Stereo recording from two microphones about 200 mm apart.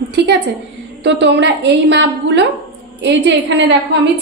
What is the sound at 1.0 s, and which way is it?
A woman's voice, 60° right (ahead or behind).